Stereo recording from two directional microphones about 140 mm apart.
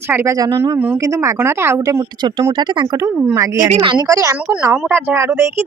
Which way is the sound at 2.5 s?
35° right (ahead or behind).